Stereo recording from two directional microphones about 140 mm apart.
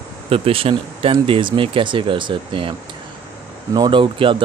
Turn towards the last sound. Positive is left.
turn(degrees=-40)  # may be behind; listen again after turning